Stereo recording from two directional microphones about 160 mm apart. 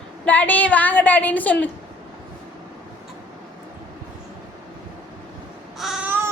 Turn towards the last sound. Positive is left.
turn(degrees=-5)  # may be behind; listen again after turning